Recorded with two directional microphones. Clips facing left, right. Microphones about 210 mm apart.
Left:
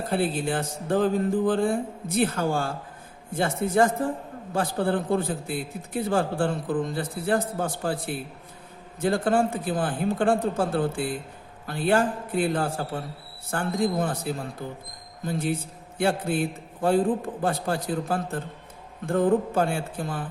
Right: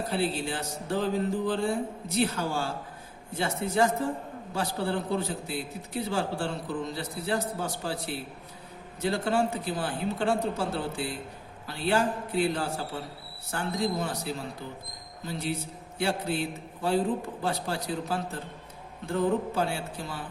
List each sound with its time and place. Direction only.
0.1 s a man's voice: 50° left (ahead or behind)